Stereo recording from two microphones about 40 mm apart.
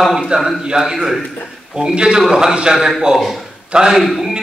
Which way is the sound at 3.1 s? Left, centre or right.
Centre.